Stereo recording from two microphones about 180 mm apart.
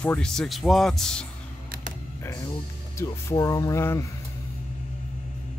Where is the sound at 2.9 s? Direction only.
15° left (ahead or behind).